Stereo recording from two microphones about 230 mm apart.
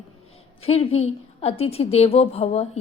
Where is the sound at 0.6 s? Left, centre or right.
Left.